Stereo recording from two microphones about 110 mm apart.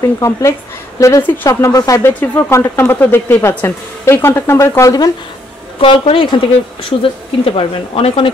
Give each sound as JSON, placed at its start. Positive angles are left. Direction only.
{"t": 0.0, "sound": "a woman's voice", "side_deg": 30}
{"t": 2.5, "sound": "a woman's voice", "side_deg": 20}
{"t": 5.8, "sound": "speech", "side_deg": 55}